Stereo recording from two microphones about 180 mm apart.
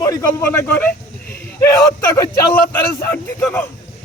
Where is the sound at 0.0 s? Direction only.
15° left (ahead or behind).